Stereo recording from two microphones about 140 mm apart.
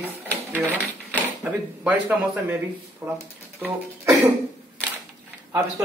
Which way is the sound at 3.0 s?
20° right (ahead or behind).